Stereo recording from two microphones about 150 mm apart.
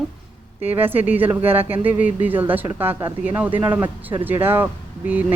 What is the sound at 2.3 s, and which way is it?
Speech, 10° right (ahead or behind).